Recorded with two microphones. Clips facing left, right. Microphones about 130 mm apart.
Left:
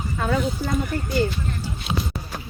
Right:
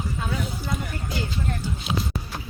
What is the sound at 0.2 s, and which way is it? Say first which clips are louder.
Speech: left 6 dB; 60° left (ahead or behind).